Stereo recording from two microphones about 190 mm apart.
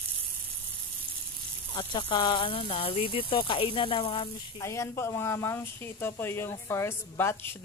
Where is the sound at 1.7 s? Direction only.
25° left (ahead or behind).